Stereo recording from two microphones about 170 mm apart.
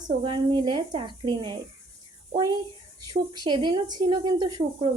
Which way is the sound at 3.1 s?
25° right (ahead or behind).